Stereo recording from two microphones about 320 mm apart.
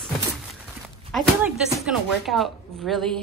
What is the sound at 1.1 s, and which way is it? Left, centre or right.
Speech, centre.